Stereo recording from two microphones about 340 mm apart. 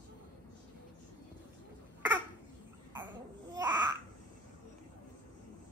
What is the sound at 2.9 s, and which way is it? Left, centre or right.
Babbling, centre.